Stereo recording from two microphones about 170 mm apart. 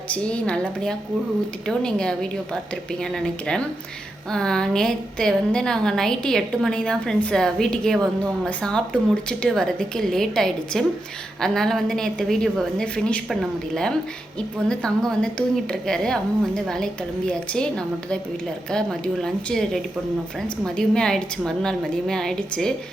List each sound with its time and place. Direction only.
0.1 s a woman's voice: 5° left (ahead or behind)